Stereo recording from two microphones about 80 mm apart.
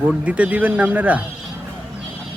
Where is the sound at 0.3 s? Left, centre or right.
Centre.